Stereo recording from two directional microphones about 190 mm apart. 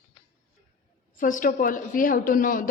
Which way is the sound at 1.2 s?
45° left (ahead or behind).